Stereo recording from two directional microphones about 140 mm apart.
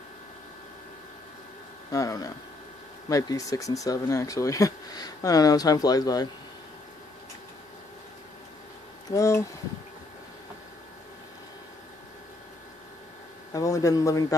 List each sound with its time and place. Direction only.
1.9 s speech: 25° left (ahead or behind)
9.1 s speech: 20° left (ahead or behind)
13.5 s speech: 25° left (ahead or behind)